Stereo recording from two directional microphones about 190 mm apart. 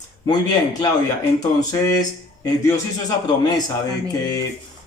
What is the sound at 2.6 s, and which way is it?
Speech, 20° left (ahead or behind).